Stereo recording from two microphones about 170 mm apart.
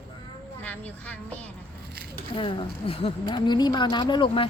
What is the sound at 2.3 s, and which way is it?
A woman's voice, 30° left (ahead or behind).